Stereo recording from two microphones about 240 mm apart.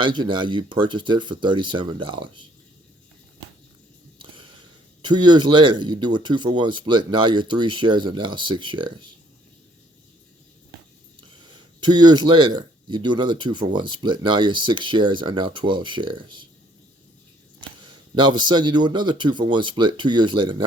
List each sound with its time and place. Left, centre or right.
0.0 s speech: centre
5.0 s speech: centre
11.5 s speech: centre
17.7 s speech: centre